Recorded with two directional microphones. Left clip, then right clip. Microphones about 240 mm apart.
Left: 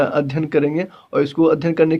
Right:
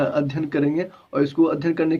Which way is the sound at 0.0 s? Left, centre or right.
Left.